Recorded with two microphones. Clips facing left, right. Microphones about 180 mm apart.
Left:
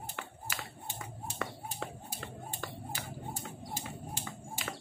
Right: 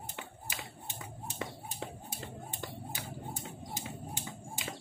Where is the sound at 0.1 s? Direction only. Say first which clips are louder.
Left 2 dB; 15° right (ahead or behind).